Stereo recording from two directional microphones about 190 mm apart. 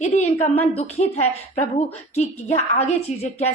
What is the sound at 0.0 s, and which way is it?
A woman's voice, 35° left (ahead or behind).